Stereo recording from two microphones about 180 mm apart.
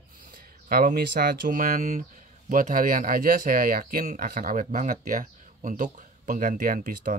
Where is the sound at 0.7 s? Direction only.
55° right (ahead or behind).